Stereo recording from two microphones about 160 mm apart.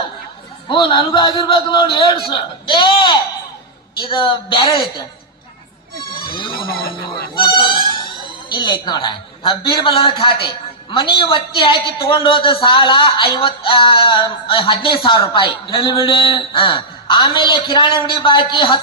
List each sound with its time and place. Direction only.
0.7 s a man's voice: 30° left (ahead or behind)
6.3 s music: 30° left (ahead or behind)
8.4 s a man's voice: 30° left (ahead or behind)